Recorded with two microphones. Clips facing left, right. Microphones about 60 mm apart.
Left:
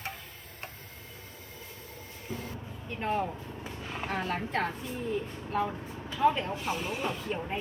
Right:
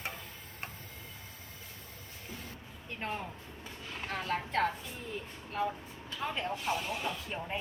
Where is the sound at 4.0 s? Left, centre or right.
Centre.